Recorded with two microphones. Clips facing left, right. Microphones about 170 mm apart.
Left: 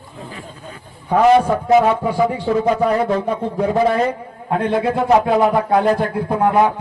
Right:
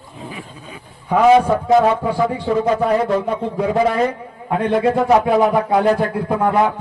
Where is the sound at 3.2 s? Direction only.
Centre (ahead or behind).